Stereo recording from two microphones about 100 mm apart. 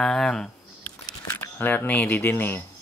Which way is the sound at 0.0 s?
5° left (ahead or behind).